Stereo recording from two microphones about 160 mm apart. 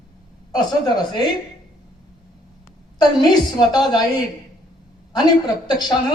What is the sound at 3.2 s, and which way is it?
Speech, 25° left (ahead or behind).